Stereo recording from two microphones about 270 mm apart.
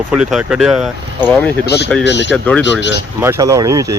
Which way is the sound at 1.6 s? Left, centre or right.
Left.